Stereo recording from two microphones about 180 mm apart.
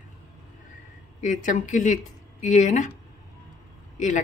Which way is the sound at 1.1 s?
45° left (ahead or behind).